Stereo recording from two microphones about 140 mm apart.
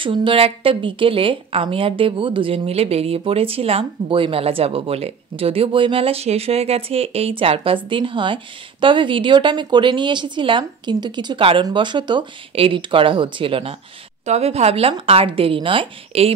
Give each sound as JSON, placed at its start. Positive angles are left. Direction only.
{"t": 0.0, "sound": "a woman's voice", "side_deg": -40}